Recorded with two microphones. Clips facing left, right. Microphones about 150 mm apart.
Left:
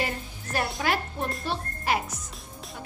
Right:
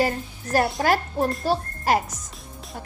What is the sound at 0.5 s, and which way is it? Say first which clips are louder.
A child's voice: right 7 dB; 40° right (ahead or behind).